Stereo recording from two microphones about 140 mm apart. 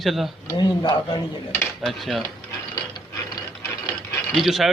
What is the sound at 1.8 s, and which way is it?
Speech, centre (ahead or behind).